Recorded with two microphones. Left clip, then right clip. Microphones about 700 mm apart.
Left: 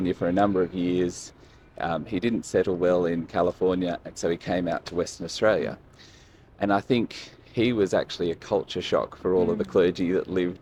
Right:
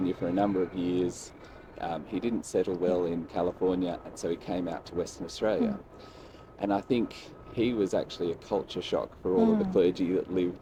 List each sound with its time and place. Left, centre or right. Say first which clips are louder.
0.0 s speech: left 5 dB; left